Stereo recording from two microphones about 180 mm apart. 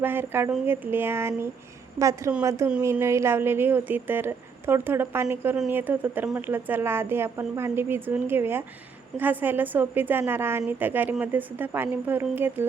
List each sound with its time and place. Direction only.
0.0 s a woman's voice: 10° right (ahead or behind)